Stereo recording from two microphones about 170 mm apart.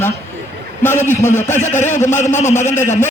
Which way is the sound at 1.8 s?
45° left (ahead or behind).